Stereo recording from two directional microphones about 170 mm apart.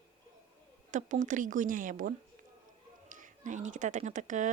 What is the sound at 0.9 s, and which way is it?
Speech, 45° right (ahead or behind).